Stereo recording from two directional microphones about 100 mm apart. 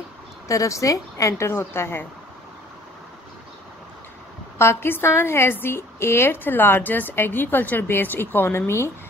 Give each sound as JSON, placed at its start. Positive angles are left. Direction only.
{"t": 0.5, "sound": "a woman's voice", "side_deg": 35}
{"t": 4.6, "sound": "a woman's voice", "side_deg": 25}